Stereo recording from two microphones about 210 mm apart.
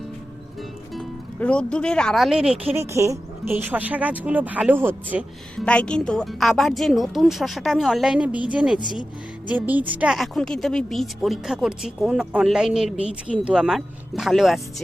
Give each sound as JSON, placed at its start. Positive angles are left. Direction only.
{"t": 0.9, "sound": "speech", "side_deg": 5}
{"t": 5.6, "sound": "a woman's voice", "side_deg": 5}